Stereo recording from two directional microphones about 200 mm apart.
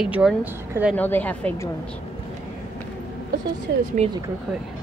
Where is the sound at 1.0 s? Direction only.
10° left (ahead or behind).